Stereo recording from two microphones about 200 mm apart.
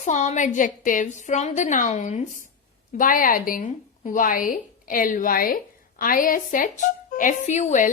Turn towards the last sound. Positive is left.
turn(degrees=35)  # may be behind; listen again after turning